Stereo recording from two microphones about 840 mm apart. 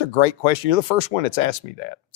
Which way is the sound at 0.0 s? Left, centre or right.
Left.